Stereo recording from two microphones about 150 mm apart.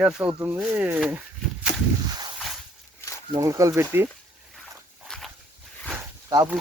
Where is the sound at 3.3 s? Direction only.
20° right (ahead or behind).